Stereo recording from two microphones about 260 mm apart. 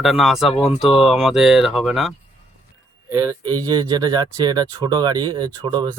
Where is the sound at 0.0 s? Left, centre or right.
Centre.